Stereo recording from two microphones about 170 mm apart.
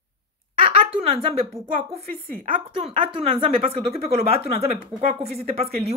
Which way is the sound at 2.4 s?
35° right (ahead or behind).